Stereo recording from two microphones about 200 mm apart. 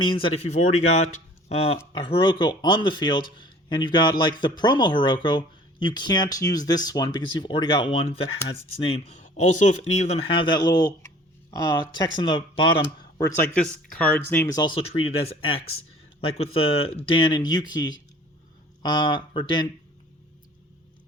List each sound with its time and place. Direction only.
0.0 s speech: 25° left (ahead or behind)
13.1 s speech: 15° left (ahead or behind)